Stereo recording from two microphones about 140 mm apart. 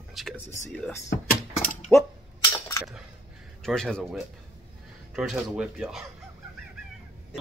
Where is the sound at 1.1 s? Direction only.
70° left (ahead or behind).